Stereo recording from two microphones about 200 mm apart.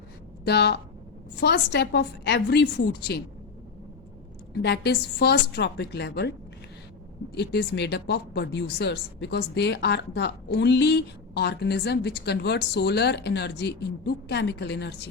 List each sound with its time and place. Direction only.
0.4 s a woman's voice: 55° left (ahead or behind)
4.6 s a woman's voice: 55° left (ahead or behind)
7.3 s a woman's voice: 55° left (ahead or behind)